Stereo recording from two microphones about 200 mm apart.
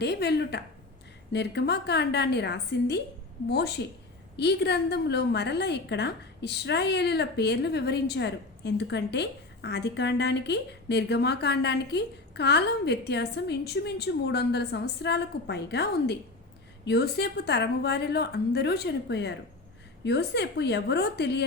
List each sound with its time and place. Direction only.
0.0 s a woman's voice: 55° left (ahead or behind)
4.4 s a woman's voice: 55° left (ahead or behind)